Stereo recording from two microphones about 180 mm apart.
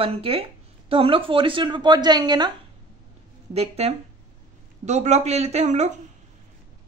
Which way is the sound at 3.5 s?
35° right (ahead or behind).